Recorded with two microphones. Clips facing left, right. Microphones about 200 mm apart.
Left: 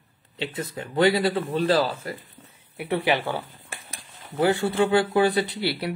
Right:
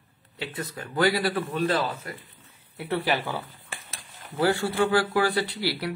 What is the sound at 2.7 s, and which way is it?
Speech, 15° left (ahead or behind).